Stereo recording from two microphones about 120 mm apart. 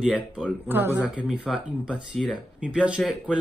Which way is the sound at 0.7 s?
20° right (ahead or behind).